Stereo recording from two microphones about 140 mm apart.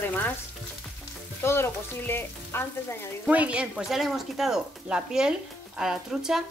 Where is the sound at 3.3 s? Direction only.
10° right (ahead or behind).